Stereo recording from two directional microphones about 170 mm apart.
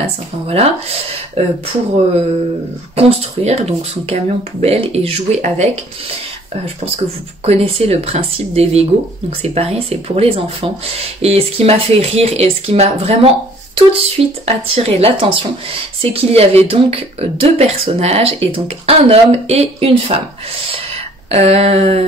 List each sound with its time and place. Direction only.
0.5 s speech: 35° right (ahead or behind)
3.0 s speech: 40° right (ahead or behind)
7.4 s speech: 35° right (ahead or behind)
21.3 s speech: 35° right (ahead or behind)